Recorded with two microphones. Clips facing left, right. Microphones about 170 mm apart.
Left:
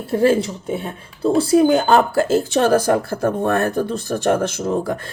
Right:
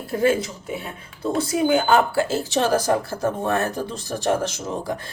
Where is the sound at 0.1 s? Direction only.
30° left (ahead or behind).